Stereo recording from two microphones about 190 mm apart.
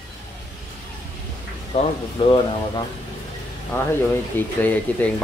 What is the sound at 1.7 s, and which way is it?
Speech, 35° left (ahead or behind).